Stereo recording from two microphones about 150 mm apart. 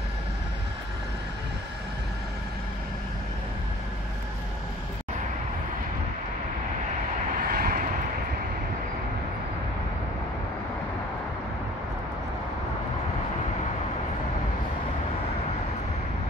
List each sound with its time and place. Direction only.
7.4 s vehicle: 85° right